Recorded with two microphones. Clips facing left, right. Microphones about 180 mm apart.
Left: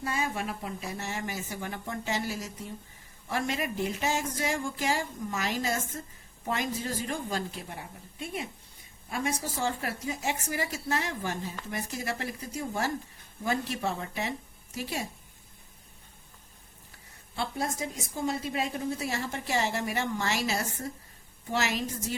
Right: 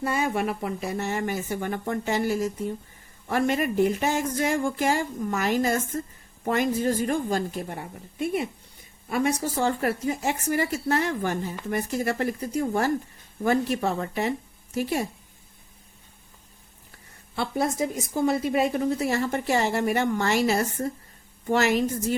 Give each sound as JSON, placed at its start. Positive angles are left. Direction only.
{"t": 0.0, "sound": "speech", "side_deg": -60}
{"t": 18.1, "sound": "speech", "side_deg": -65}